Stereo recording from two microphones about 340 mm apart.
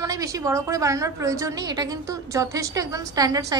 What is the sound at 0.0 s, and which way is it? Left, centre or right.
A woman's voice, centre.